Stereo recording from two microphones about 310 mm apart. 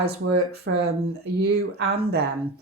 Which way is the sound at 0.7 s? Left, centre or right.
Right.